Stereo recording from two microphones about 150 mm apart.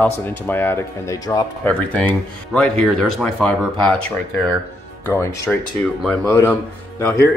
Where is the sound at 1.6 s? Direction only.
10° left (ahead or behind).